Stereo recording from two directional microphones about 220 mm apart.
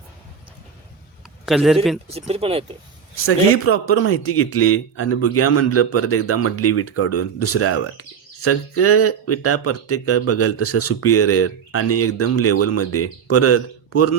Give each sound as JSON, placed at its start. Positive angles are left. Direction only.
{"t": 1.5, "sound": "speech", "side_deg": 0}
{"t": 2.0, "sound": "speech", "side_deg": -30}
{"t": 3.2, "sound": "a man's voice", "side_deg": 70}